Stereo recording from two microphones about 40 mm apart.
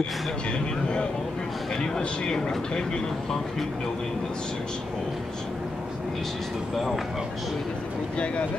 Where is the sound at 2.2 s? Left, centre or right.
Centre.